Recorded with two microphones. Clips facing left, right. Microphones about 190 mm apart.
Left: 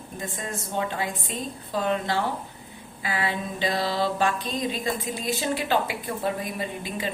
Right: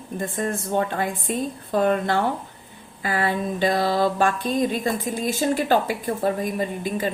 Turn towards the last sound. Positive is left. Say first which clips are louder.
# right 6 dB
turn(degrees=-45)  # may be behind; listen again after turning